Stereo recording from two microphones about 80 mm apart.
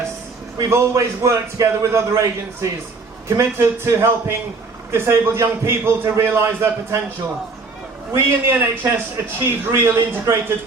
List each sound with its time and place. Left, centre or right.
0.6 s a man's voice: right
8.1 s a man's voice: right